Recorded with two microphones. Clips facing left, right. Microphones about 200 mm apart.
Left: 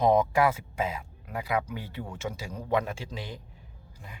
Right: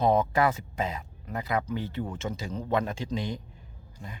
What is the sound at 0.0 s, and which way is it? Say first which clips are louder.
Speech: left 1 dB; 10° left (ahead or behind).